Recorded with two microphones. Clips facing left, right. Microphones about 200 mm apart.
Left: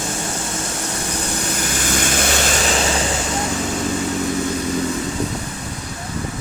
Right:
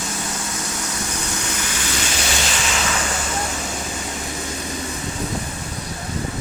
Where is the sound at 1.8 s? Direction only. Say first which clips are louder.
Left 5 dB; 50° left (ahead or behind).